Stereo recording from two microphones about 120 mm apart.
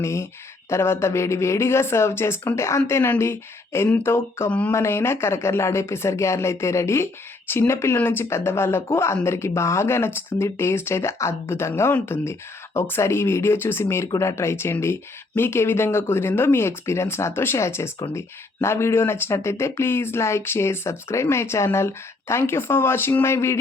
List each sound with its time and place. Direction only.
0.0 s speech: 25° left (ahead or behind)